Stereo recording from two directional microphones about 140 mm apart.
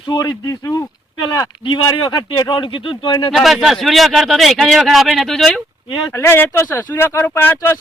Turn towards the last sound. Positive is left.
turn(degrees=15)  # may be behind; listen again after turning